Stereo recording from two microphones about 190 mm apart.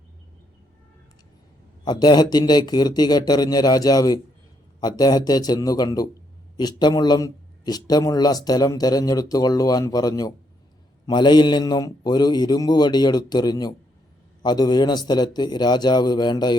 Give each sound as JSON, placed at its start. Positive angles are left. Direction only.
{"t": 1.8, "sound": "speech", "side_deg": 20}